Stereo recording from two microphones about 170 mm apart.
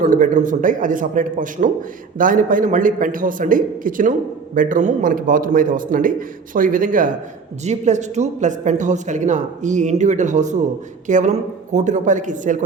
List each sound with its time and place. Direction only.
0.0 s a man's voice: 50° right (ahead or behind)